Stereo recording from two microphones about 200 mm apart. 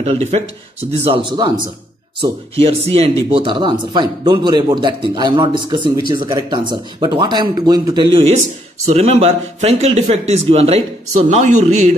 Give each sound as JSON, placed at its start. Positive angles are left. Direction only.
{"t": 0.0, "sound": "a man's voice", "side_deg": -30}